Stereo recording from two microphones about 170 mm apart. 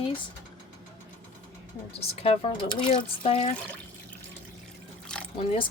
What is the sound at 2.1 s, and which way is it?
Speech, 35° left (ahead or behind).